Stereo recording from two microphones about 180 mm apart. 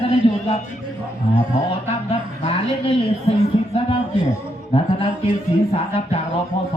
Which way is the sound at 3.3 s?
35° left (ahead or behind).